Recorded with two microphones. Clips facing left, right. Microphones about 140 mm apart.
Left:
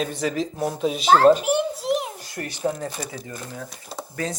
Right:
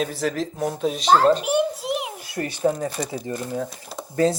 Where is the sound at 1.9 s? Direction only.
5° right (ahead or behind).